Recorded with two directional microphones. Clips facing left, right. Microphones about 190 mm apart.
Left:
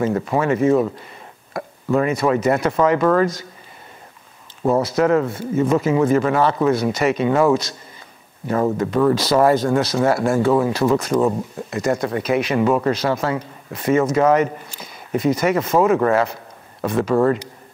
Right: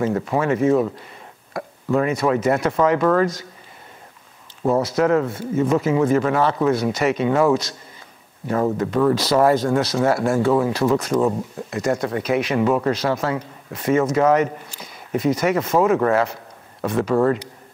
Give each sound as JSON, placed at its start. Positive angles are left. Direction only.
{"t": 0.0, "sound": "speech", "side_deg": 20}
{"t": 4.6, "sound": "speech", "side_deg": 25}
{"t": 4.9, "sound": "speech", "side_deg": 15}
{"t": 9.1, "sound": "speech", "side_deg": 5}
{"t": 9.4, "sound": "speech", "side_deg": 20}